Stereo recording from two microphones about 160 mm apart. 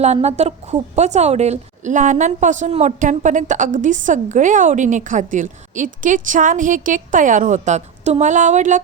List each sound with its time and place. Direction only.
0.0 s a woman's voice: 45° right (ahead or behind)